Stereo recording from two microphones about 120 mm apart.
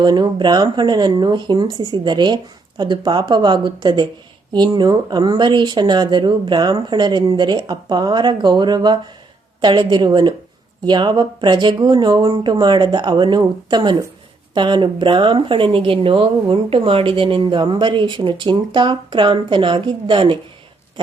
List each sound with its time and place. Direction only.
0.0 s speech: 40° right (ahead or behind)